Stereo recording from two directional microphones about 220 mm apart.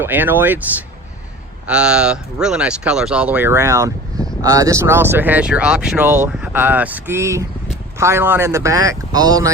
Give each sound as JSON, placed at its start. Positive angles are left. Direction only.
{"t": 0.0, "sound": "speech", "side_deg": -10}